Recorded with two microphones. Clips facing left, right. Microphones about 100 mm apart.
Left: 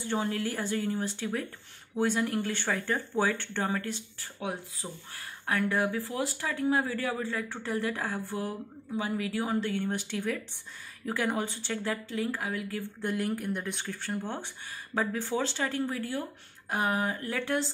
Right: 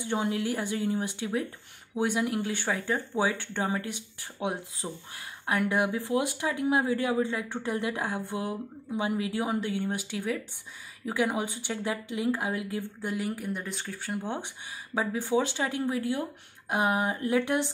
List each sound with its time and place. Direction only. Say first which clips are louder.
0.0 s speech: right 2 dB; 15° right (ahead or behind)
13.0 s speech: left 3 dB; 5° right (ahead or behind)
14.2 s speech: right 2 dB; 15° right (ahead or behind)